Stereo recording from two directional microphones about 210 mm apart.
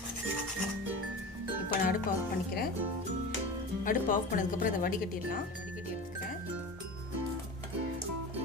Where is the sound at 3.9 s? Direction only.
40° left (ahead or behind).